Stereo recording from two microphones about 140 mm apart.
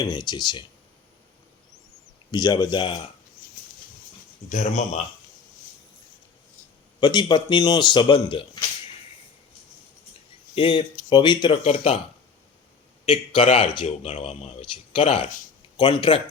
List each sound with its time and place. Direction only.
0.0 s a man's voice: 30° left (ahead or behind)
2.3 s a man's voice: 30° left (ahead or behind)
4.4 s speech: 55° left (ahead or behind)
7.0 s a man's voice: 35° left (ahead or behind)
10.5 s a man's voice: 40° left (ahead or behind)
13.1 s a man's voice: 40° left (ahead or behind)
14.0 s a man's voice: 60° left (ahead or behind); by 16.2 s 40° left (ahead or behind)